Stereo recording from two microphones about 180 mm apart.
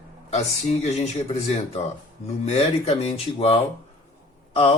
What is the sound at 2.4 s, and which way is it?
Speech, 35° left (ahead or behind).